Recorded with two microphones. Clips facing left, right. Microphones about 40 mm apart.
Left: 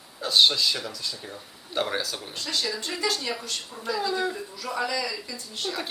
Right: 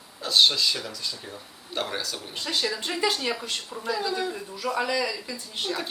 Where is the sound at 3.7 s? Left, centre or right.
Centre.